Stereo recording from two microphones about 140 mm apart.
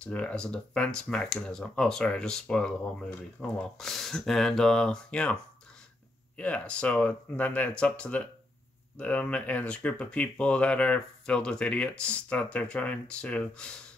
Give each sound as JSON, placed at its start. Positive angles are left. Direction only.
{"t": 0.0, "sound": "speech", "side_deg": 10}